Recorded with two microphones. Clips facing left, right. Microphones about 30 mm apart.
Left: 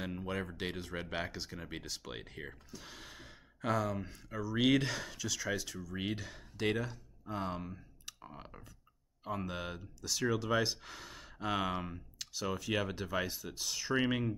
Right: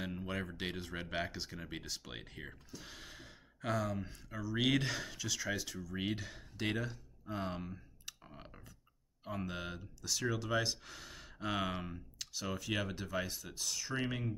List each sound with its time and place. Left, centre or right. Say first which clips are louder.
0.0 s speech: left 2 dB; centre
8.4 s a sound: left 3 dB; centre
9.2 s speech: left 2 dB; centre; by 14.3 s left